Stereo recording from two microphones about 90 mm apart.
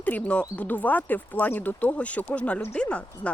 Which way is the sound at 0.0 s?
15° left (ahead or behind).